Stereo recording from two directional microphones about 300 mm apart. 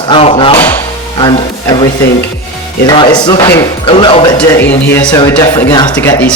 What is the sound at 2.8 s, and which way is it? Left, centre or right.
Speech, centre.